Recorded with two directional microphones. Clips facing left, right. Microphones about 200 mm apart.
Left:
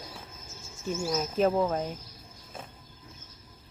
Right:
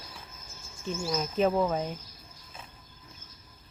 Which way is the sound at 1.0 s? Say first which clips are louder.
Left 1 dB; 5° left (ahead or behind).